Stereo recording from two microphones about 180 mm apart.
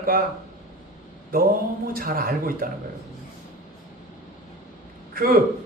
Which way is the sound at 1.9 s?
55° right (ahead or behind).